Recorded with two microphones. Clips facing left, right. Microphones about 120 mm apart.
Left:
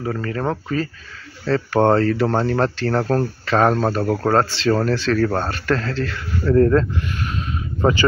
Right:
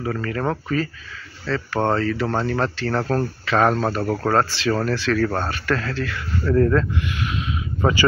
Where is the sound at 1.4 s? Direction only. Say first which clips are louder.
Left 5 dB; 40° left (ahead or behind).